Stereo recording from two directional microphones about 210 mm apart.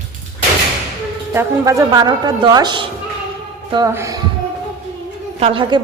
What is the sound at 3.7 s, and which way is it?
Music, 15° right (ahead or behind).